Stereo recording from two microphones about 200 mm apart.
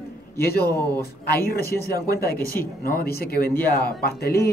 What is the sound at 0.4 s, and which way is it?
A man's voice, 50° left (ahead or behind).